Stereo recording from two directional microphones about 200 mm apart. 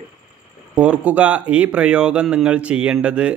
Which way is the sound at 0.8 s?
5° right (ahead or behind).